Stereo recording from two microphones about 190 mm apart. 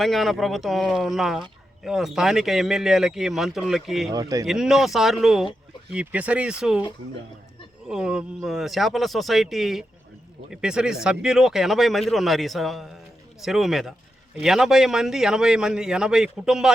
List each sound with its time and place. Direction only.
0.0 s speech: centre (ahead or behind)
4.1 s speech: 20° right (ahead or behind)
4.4 s speech: centre (ahead or behind)
7.9 s speech: 5° right (ahead or behind)